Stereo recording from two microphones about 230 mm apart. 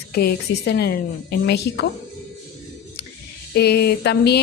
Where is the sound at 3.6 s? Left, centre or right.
Left.